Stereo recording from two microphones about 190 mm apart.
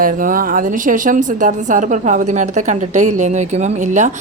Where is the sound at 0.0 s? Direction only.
45° right (ahead or behind).